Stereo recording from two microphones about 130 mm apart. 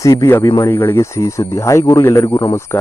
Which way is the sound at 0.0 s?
25° left (ahead or behind).